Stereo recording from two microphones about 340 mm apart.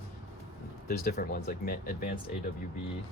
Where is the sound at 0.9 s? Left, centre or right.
Left.